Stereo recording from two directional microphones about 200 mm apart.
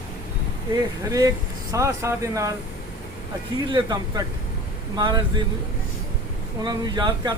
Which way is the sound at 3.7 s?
20° right (ahead or behind).